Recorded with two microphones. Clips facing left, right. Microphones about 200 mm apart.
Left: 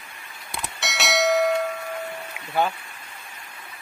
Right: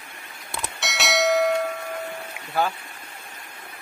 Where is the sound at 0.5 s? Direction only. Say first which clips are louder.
Even; centre (ahead or behind).